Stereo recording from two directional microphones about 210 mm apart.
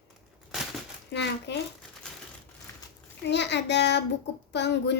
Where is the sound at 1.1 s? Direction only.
55° left (ahead or behind).